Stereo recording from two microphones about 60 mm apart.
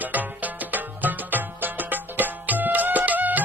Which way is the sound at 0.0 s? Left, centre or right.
Right.